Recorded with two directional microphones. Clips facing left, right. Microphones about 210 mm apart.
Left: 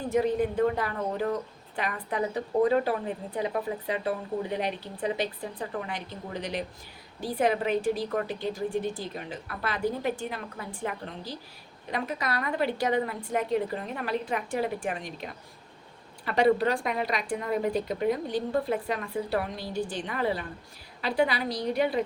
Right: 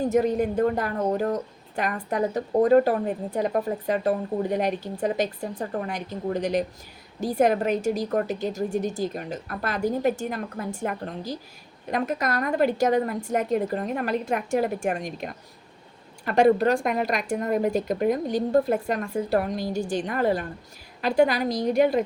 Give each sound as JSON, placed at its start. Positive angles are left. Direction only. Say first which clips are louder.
{"t": 0.1, "sound": "a woman's voice", "louder": "right 3 dB", "side_deg": -45}